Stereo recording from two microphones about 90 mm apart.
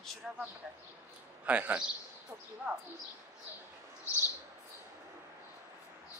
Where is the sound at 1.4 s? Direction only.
15° right (ahead or behind).